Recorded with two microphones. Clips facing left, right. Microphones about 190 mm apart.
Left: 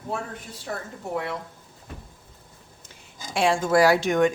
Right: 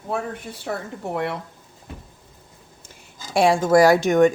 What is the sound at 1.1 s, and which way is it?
Speech, 65° right (ahead or behind).